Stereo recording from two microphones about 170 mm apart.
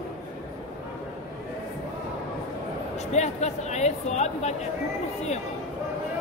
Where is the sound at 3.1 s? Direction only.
40° left (ahead or behind).